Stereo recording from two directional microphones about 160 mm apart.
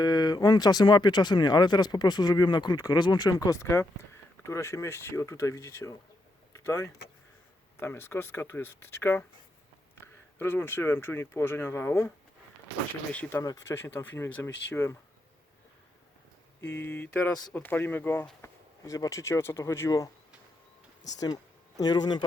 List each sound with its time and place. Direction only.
0.0 s speech: 25° left (ahead or behind)
6.5 s vehicle: 15° left (ahead or behind)
7.8 s speech: 15° left (ahead or behind)
10.3 s speech: 15° left (ahead or behind)
13.4 s speech: 20° left (ahead or behind)
16.8 s speech: 10° left (ahead or behind)
21.8 s speech: 25° left (ahead or behind)